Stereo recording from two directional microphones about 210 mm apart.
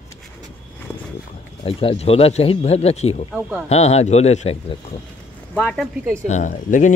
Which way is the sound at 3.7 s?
30° left (ahead or behind).